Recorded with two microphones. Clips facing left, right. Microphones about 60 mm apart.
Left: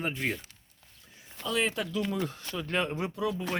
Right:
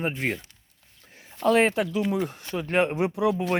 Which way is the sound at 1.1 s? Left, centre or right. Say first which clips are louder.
Right 12 dB; right.